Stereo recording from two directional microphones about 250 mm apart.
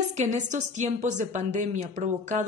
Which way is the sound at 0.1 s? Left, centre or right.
Right.